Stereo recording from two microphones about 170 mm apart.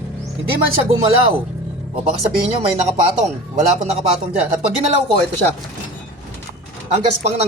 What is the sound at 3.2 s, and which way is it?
Speech, 40° right (ahead or behind).